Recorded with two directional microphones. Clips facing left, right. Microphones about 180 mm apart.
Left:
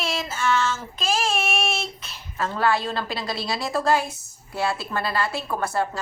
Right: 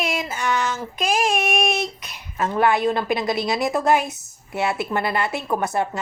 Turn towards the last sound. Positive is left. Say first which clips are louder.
# right 2 dB
turn(degrees=-20)  # may be behind; listen again after turning